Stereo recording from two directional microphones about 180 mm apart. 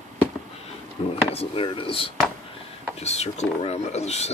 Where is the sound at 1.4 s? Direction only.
30° left (ahead or behind).